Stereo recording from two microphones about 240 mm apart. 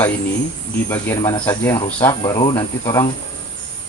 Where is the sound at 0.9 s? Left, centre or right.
Centre.